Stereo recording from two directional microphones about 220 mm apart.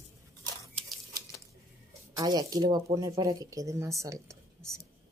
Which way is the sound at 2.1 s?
15° right (ahead or behind).